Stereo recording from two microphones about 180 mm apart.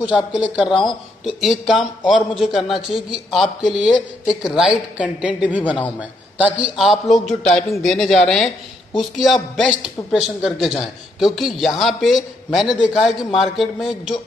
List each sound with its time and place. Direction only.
0.0 s a man's voice: 5° right (ahead or behind)
5.6 s a man's voice: 10° left (ahead or behind)
5.9 s a man's voice: 5° right (ahead or behind)